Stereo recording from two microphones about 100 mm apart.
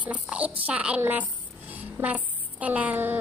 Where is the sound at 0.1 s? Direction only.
15° right (ahead or behind).